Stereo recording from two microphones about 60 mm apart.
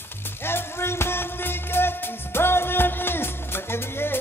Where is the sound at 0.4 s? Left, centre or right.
Left.